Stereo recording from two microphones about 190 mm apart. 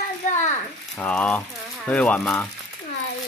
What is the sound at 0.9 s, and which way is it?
Speech, 5° left (ahead or behind).